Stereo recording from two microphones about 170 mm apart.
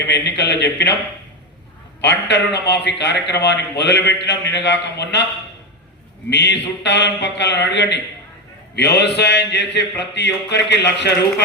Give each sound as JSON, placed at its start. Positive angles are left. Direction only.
{"t": 0.1, "sound": "speech", "side_deg": 85}
{"t": 2.0, "sound": "a man's voice", "side_deg": 85}
{"t": 6.3, "sound": "a man's voice", "side_deg": 90}